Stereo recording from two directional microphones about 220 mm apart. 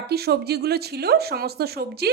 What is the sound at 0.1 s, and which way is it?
A woman's voice, 45° right (ahead or behind).